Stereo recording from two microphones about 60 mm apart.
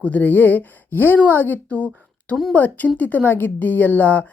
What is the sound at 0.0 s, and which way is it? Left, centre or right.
A woman's voice, left.